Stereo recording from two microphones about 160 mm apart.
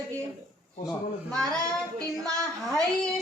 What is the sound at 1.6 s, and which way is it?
Child singing, 20° right (ahead or behind).